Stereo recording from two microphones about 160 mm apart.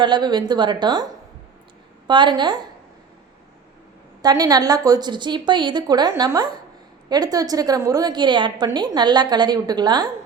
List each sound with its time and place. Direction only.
0.0 s a woman's voice: 30° right (ahead or behind)
2.0 s a woman's voice: 30° right (ahead or behind)
4.2 s a woman's voice: 25° right (ahead or behind)